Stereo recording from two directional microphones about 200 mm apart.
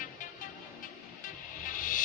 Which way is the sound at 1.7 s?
40° left (ahead or behind).